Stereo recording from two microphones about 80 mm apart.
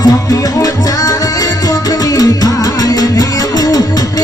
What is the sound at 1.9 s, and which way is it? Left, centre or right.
Music, left.